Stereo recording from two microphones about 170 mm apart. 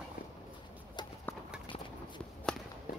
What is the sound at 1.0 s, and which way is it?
Clip-clop, 25° left (ahead or behind).